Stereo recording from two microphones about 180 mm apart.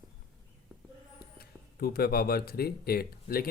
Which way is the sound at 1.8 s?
55° left (ahead or behind).